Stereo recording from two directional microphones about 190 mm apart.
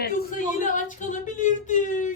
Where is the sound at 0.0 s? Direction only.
45° left (ahead or behind).